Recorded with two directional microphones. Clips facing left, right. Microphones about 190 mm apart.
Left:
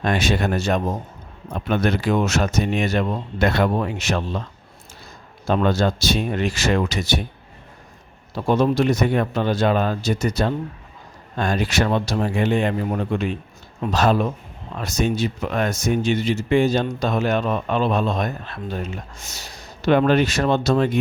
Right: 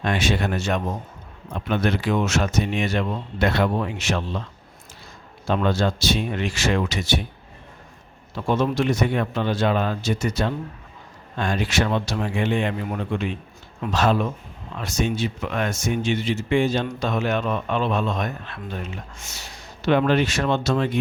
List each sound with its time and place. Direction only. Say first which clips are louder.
0.0 s speech: left 2 dB; 40° left (ahead or behind)
5.5 s speech: left 2 dB; 40° left (ahead or behind)
8.4 s speech: left 3 dB; 35° left (ahead or behind)